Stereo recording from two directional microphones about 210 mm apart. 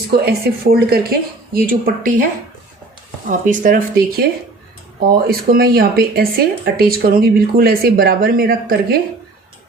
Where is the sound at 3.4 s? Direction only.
40° right (ahead or behind).